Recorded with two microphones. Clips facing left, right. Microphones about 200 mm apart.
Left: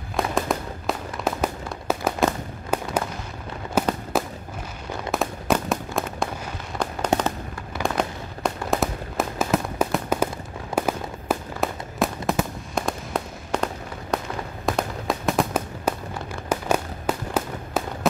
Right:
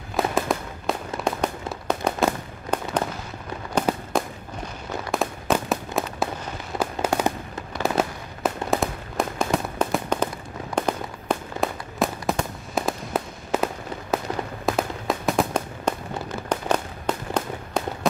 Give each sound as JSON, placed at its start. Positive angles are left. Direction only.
{"t": 0.1, "sound": "fireworks", "side_deg": 0}
{"t": 3.8, "sound": "fireworks", "side_deg": 5}
{"t": 7.1, "sound": "fireworks", "side_deg": 20}
{"t": 7.8, "sound": "fireworks", "side_deg": -5}
{"t": 14.1, "sound": "a sound", "side_deg": -5}
{"t": 14.7, "sound": "fireworks", "side_deg": 0}